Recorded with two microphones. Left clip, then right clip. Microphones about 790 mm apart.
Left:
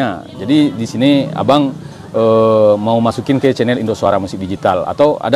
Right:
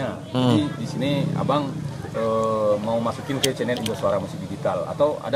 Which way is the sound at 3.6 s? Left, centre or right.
Left.